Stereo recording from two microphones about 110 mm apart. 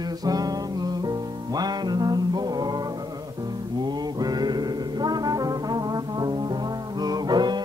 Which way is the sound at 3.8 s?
40° right (ahead or behind).